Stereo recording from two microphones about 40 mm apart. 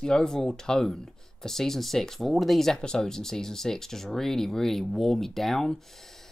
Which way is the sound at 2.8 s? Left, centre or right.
Centre.